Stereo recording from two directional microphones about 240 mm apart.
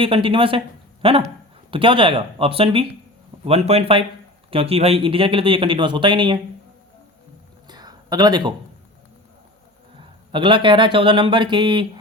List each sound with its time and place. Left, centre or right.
0.0 s speech: right
7.7 s a sound: centre
10.3 s speech: centre